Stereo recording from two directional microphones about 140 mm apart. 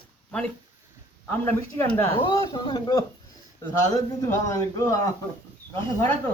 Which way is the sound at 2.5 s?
40° left (ahead or behind).